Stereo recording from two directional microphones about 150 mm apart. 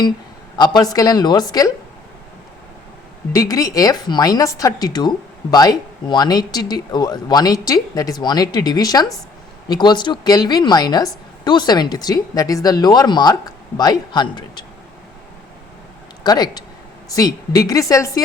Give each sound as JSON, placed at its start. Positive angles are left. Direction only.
{"t": 0.5, "sound": "a man's voice", "side_deg": 30}
{"t": 3.3, "sound": "a woman's voice", "side_deg": 25}
{"t": 16.2, "sound": "a woman's voice", "side_deg": 25}